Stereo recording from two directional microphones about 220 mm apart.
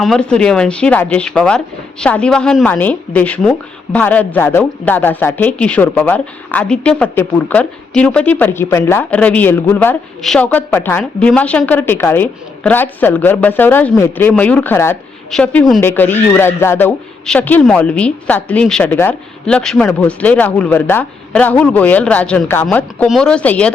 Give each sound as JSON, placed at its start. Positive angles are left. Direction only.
{"t": 0.0, "sound": "speech", "side_deg": 0}